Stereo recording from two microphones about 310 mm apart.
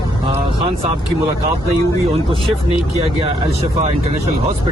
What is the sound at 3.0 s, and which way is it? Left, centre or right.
Speech, centre.